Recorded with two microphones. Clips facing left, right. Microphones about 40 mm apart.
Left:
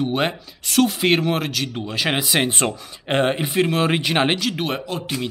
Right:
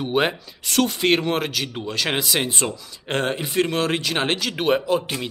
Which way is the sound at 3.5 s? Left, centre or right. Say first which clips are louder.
Left 2 dB; centre.